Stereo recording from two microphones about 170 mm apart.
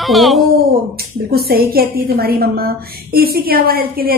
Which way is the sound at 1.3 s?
65° right (ahead or behind).